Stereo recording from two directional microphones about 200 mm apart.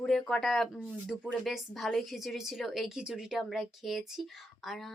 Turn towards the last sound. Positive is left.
turn(degrees=0)  # may be behind; listen again after turning